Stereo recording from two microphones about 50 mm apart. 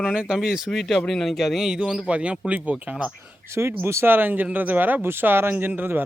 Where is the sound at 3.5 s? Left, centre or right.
Right.